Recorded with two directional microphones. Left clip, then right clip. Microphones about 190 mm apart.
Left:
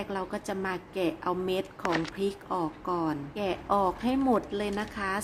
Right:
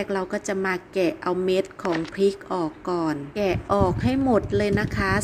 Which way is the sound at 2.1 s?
15° right (ahead or behind).